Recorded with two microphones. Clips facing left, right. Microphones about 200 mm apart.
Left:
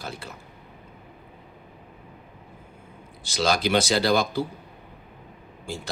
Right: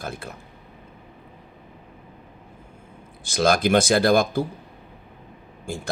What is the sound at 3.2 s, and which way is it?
Speech, 50° right (ahead or behind).